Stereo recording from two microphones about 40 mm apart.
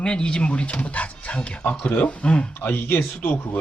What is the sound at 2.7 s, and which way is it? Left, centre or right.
Speech, left.